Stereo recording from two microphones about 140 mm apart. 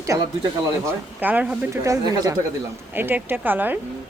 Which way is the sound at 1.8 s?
25° right (ahead or behind).